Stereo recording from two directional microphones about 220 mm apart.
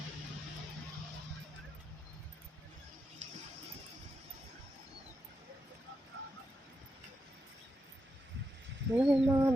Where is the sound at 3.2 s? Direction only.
30° right (ahead or behind).